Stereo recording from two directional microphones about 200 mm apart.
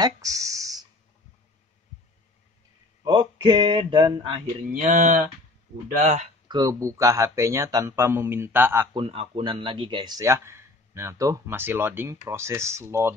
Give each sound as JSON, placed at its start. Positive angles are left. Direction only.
{"t": 0.0, "sound": "a sound", "side_deg": -15}
{"t": 3.0, "sound": "speech", "side_deg": -25}
{"t": 4.7, "sound": "speech", "side_deg": -40}
{"t": 6.5, "sound": "speech", "side_deg": -20}
{"t": 8.9, "sound": "speech", "side_deg": -25}